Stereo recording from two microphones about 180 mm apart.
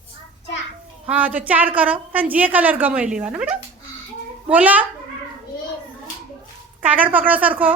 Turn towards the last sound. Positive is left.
turn(degrees=-10)  # may be behind; listen again after turning